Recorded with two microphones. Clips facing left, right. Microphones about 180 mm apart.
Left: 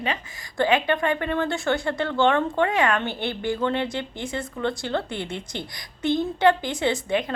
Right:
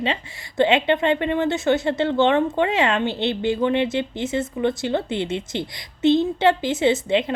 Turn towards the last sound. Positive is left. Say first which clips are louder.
# right 5 dB
turn(degrees=-25)  # may be behind; listen again after turning